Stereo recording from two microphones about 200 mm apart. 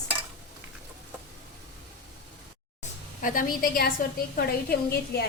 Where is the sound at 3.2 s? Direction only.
45° left (ahead or behind).